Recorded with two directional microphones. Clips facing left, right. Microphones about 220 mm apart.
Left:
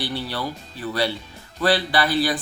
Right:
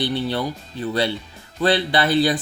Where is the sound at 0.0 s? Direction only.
20° right (ahead or behind).